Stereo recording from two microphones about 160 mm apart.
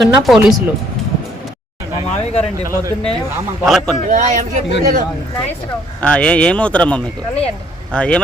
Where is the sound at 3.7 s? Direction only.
Centre (ahead or behind).